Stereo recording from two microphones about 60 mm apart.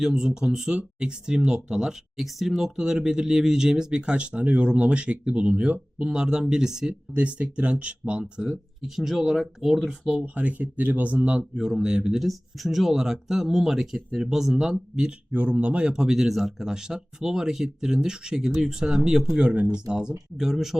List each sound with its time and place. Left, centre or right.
0.0 s speech: centre
7.1 s speech: right; by 10.2 s centre
10.3 s speech: right
11.5 s speech: centre